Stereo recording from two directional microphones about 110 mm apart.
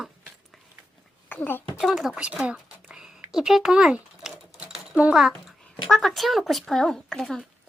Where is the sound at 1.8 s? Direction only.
Centre (ahead or behind).